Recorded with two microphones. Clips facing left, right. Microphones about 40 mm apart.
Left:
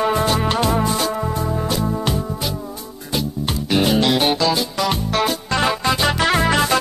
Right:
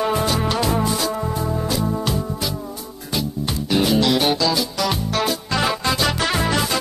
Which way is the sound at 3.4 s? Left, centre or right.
Left.